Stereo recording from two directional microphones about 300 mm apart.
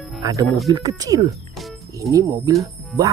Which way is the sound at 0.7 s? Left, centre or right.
Centre.